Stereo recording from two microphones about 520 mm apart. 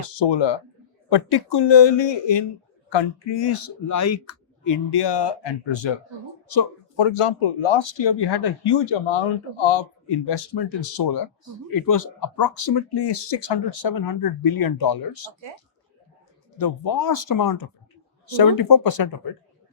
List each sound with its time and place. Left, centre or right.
0.2 s speech: left
3.8 s speech: left
6.5 s a sound: left
7.0 s speech: left
7.9 s speech: left
8.8 s speech: left
10.9 s speech: left
12.5 s speech: left
13.5 s speech: left
13.8 s speech: left
16.6 s speech: left